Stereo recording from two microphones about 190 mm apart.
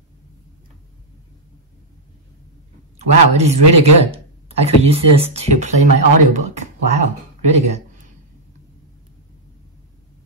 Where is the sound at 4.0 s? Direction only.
35° right (ahead or behind).